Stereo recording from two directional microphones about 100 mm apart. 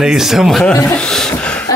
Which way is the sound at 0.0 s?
5° right (ahead or behind).